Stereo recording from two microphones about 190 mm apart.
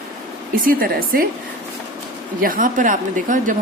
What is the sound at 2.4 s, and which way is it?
A woman's voice, 45° right (ahead or behind).